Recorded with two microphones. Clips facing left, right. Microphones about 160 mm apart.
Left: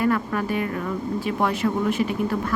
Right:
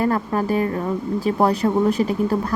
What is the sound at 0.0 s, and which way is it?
Speech, 35° right (ahead or behind).